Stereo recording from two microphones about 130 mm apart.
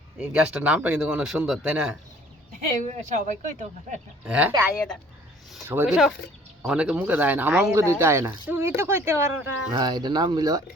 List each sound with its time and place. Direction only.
0.2 s speech: 10° right (ahead or behind)
2.8 s speech: 70° right (ahead or behind)
4.3 s speech: 10° right (ahead or behind)
4.7 s speech: 5° left (ahead or behind)
5.6 s speech: 15° right (ahead or behind)
5.9 s speech: 5° right (ahead or behind)
9.7 s speech: 35° right (ahead or behind)